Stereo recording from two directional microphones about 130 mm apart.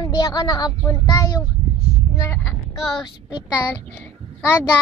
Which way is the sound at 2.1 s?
20° left (ahead or behind).